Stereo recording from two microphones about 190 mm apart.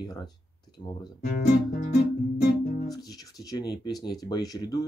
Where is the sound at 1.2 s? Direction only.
50° left (ahead or behind).